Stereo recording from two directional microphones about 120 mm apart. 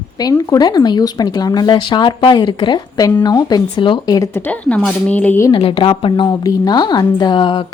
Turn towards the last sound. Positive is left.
turn(degrees=40)  # may be behind; listen again after turning